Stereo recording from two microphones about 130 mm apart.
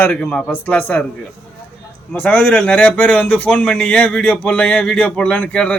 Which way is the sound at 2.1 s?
10° left (ahead or behind).